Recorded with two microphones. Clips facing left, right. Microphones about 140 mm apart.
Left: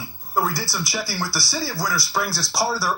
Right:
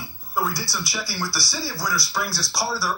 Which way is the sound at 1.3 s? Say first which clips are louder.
Left 3 dB; 50° left (ahead or behind).